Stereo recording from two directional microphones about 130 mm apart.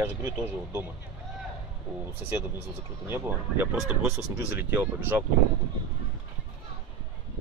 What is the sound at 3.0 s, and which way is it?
Speech, 15° right (ahead or behind).